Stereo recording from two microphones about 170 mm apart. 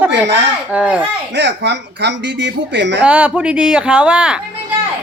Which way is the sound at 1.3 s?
90° right.